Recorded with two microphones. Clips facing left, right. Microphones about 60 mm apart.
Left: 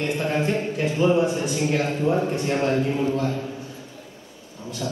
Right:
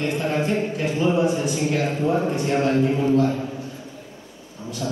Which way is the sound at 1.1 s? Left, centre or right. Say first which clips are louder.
Right 1 dB; right.